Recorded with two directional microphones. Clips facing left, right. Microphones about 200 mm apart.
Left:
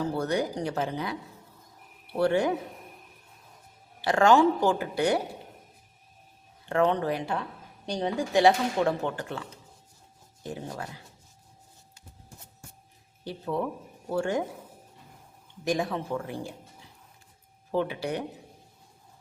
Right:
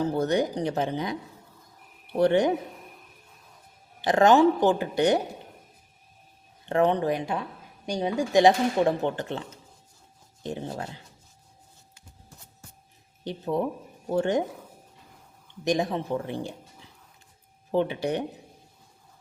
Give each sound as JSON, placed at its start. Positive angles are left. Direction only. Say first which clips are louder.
{"t": 0.0, "sound": "speech", "louder": "right 3 dB", "side_deg": -20}
{"t": 2.1, "sound": "speech", "louder": "right 3 dB", "side_deg": -20}
{"t": 4.0, "sound": "speech", "louder": "right 2 dB", "side_deg": -20}
{"t": 6.7, "sound": "speech", "louder": "right 2 dB", "side_deg": -20}
{"t": 13.4, "sound": "speech", "louder": "right 3 dB", "side_deg": -20}
{"t": 15.6, "sound": "speech", "louder": "right 3 dB", "side_deg": -20}
{"t": 17.7, "sound": "speech", "louder": "right 3 dB", "side_deg": -20}